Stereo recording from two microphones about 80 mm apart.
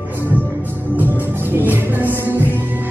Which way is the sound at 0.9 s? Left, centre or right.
Right.